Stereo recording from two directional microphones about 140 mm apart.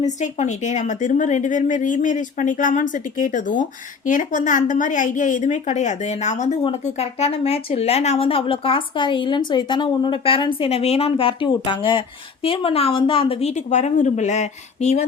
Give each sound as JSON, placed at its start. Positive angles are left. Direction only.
{"t": 0.0, "sound": "speech", "side_deg": 60}